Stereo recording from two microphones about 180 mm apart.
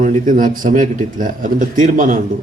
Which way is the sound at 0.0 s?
45° right (ahead or behind).